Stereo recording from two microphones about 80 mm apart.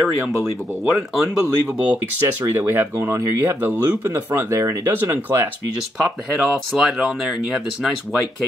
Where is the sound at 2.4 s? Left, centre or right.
Right.